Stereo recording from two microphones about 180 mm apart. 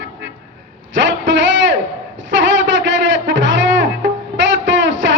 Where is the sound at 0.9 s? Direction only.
90° right.